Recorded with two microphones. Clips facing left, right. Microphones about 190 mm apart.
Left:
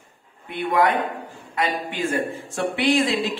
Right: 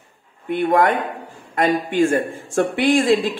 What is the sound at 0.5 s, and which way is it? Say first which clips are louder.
Speech: right 4 dB; 45° right (ahead or behind).